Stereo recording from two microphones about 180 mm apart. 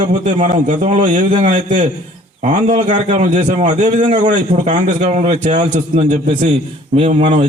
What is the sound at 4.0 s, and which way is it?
Speech, 30° right (ahead or behind).